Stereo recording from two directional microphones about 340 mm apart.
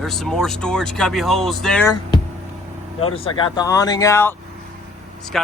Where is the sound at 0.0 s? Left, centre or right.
Centre.